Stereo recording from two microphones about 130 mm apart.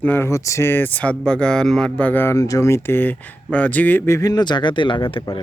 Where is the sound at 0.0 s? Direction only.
15° left (ahead or behind).